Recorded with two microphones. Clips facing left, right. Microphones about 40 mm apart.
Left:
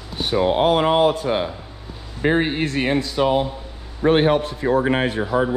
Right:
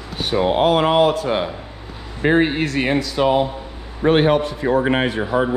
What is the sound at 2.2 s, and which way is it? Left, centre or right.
Speech, right.